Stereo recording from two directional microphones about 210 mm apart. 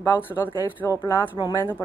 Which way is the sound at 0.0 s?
10° left (ahead or behind).